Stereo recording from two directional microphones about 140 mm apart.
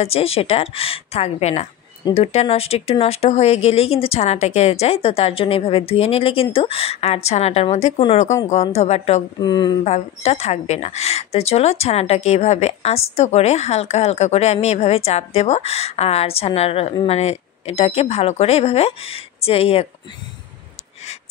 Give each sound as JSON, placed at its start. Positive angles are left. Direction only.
{"t": 0.0, "sound": "a woman's voice", "side_deg": 45}
{"t": 9.4, "sound": "a woman's voice", "side_deg": 30}
{"t": 9.8, "sound": "a woman's voice", "side_deg": 50}